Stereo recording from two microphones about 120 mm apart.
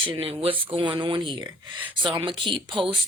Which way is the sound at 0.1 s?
50° right (ahead or behind).